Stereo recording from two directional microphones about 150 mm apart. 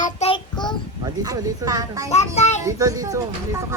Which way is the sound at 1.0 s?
25° right (ahead or behind).